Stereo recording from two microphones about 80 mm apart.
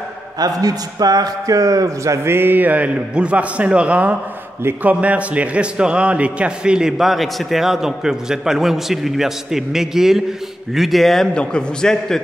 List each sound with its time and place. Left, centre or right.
0.4 s a man's voice: right
2.2 s a man's voice: right; by 12.2 s centre